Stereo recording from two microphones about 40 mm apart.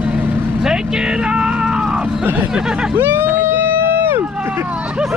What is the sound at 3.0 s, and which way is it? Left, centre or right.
Run, right.